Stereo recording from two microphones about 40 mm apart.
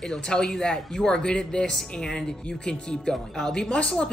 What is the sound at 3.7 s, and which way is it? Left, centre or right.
Speech, left.